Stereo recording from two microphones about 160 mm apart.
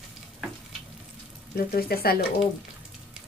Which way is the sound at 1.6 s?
70° left (ahead or behind).